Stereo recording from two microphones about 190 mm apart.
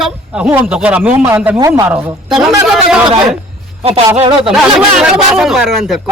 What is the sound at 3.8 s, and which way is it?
Speech, 30° right (ahead or behind).